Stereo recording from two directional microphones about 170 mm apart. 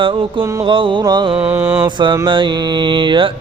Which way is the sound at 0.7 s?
30° right (ahead or behind).